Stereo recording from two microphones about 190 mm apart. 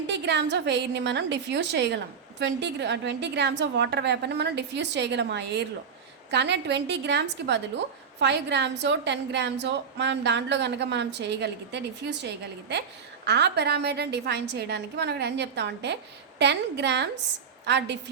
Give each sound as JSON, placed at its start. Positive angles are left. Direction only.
{"t": 0.1, "sound": "a woman's voice", "side_deg": -65}